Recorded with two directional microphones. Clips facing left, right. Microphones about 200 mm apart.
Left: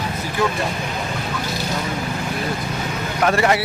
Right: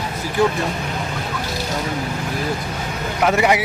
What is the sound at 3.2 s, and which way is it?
Speech, 15° right (ahead or behind).